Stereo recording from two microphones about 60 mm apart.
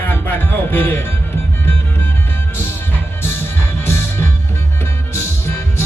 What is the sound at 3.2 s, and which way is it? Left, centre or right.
Music, left.